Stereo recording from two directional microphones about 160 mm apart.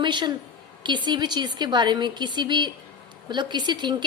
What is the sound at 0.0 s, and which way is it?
A woman's voice, 30° right (ahead or behind).